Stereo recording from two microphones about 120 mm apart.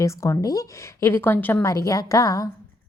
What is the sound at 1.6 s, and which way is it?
Speech, 25° left (ahead or behind).